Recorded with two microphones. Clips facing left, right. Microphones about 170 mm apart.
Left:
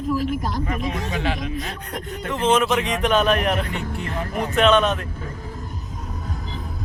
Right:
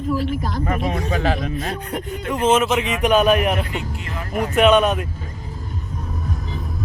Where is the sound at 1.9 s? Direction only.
5° right (ahead or behind).